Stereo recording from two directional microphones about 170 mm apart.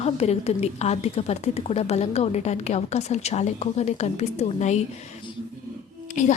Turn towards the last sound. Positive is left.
turn(degrees=45)  # may be behind; listen again after turning